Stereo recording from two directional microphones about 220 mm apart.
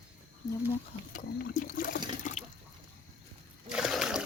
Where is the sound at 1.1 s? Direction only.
40° left (ahead or behind).